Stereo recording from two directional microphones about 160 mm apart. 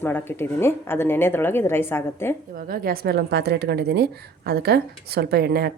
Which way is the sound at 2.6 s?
65° right (ahead or behind).